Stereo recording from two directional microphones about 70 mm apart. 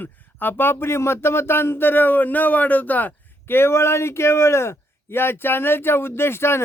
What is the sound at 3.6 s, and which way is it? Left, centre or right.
A man's voice, left.